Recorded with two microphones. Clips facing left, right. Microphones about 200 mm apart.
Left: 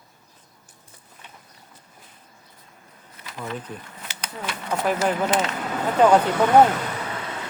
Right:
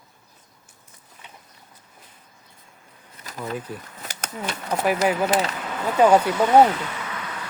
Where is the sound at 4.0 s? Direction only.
45° right (ahead or behind).